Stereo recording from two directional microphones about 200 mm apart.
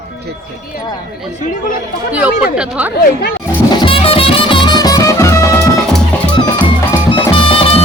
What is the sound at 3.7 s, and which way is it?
Music, 25° left (ahead or behind).